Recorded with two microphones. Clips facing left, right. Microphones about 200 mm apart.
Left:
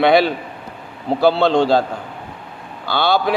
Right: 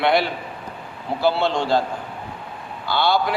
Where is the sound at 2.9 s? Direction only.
70° left (ahead or behind).